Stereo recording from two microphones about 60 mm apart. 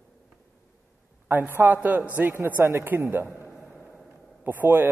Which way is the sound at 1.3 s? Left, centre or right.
Right.